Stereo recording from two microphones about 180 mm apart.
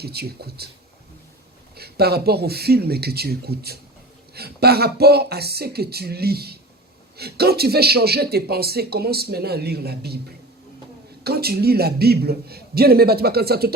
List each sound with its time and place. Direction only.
0.0 s speech: 60° right (ahead or behind)
1.7 s speech: 60° right (ahead or behind)
11.2 s speech: 60° right (ahead or behind)